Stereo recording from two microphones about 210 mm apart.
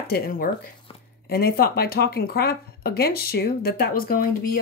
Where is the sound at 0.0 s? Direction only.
45° left (ahead or behind).